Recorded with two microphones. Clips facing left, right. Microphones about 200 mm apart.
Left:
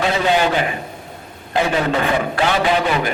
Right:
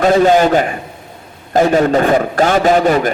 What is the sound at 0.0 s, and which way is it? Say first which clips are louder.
A man's voice: right 7 dB; 45° right (ahead or behind).